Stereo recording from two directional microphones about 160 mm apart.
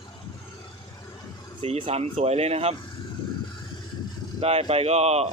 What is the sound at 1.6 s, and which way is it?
Speech, 35° right (ahead or behind).